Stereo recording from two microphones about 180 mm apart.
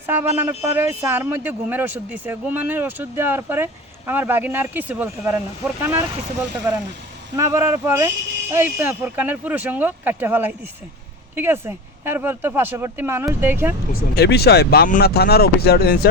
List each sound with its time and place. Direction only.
0.0 s a man's voice: 10° right (ahead or behind)
7.3 s a man's voice: 15° right (ahead or behind)
13.9 s speech: 65° left (ahead or behind)